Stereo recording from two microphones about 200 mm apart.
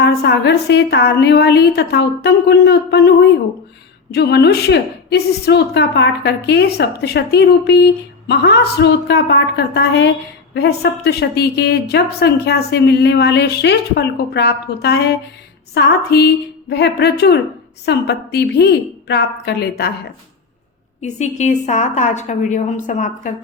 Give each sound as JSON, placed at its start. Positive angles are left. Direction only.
{"t": 0.0, "sound": "a woman's voice", "side_deg": 55}
{"t": 21.0, "sound": "a woman's voice", "side_deg": 35}